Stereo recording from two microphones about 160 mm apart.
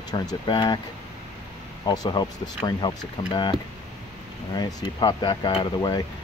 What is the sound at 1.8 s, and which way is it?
Speech, 25° left (ahead or behind).